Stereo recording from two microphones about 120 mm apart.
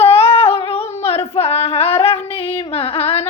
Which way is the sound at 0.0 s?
55° left (ahead or behind).